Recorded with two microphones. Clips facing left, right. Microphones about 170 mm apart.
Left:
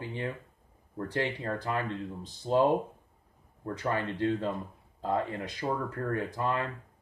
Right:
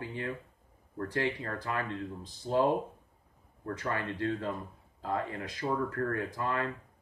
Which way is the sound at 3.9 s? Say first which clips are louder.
Left 4 dB; 20° left (ahead or behind).